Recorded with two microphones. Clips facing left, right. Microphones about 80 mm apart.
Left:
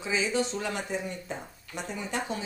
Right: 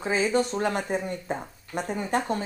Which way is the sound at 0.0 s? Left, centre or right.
Right.